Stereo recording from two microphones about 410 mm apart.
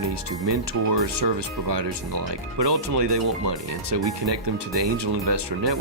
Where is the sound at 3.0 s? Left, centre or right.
Right.